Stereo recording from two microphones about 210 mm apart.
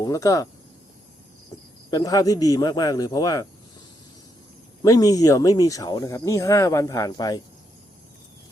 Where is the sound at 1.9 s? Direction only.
15° left (ahead or behind).